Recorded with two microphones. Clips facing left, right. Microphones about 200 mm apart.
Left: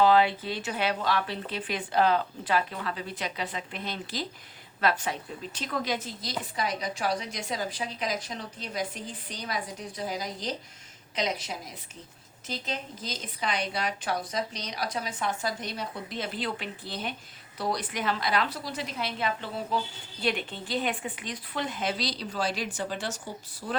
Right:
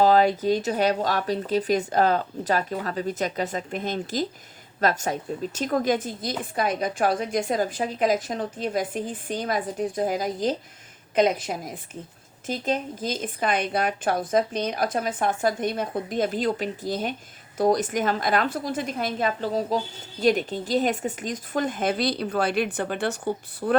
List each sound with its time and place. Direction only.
0.0 s a woman's voice: 40° right (ahead or behind); by 23.7 s 60° right (ahead or behind)